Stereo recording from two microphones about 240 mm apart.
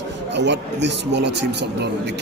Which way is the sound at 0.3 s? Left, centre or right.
Right.